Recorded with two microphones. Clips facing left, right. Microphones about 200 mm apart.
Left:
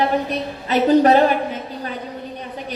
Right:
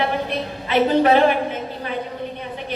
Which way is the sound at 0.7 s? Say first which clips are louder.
Left 2 dB; 40° left (ahead or behind).